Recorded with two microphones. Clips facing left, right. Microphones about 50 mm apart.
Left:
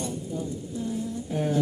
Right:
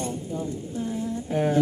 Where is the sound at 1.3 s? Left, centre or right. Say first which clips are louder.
Right 4 dB; right.